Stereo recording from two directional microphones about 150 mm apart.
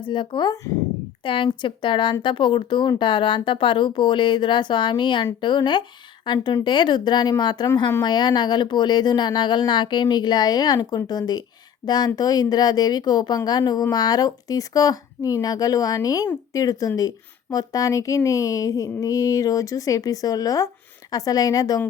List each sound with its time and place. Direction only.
0.0 s speech: 35° left (ahead or behind)